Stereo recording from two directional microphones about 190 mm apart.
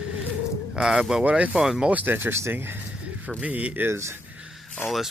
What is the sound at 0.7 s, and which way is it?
Speech, 5° right (ahead or behind).